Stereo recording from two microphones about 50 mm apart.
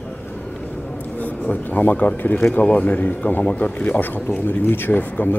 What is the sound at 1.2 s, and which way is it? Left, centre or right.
Speech, left.